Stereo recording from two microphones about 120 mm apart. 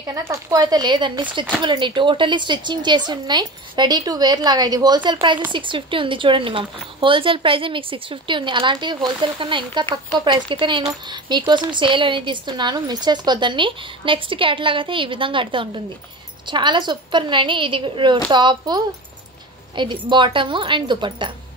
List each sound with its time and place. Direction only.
0.0 s speech: 25° right (ahead or behind)
0.6 s a woman's voice: 35° right (ahead or behind)